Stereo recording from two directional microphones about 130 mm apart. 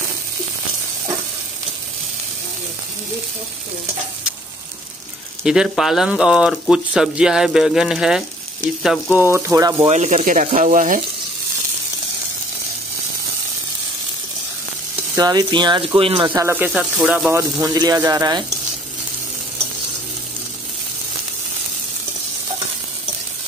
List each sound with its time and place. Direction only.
5.4 s speech: 5° right (ahead or behind)
9.1 s speech: 15° right (ahead or behind)
9.8 s speech: 65° right (ahead or behind); by 11.0 s 85° right
15.1 s speech: 30° right (ahead or behind)
16.3 s speech: 20° right (ahead or behind)
17.3 s speech: 20° right (ahead or behind)